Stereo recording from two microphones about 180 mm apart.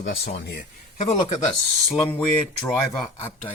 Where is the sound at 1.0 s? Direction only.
40° left (ahead or behind).